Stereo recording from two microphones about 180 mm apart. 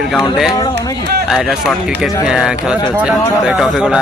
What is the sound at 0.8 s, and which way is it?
Speech, 20° left (ahead or behind).